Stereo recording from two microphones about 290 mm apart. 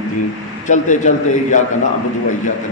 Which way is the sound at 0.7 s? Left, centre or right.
Left.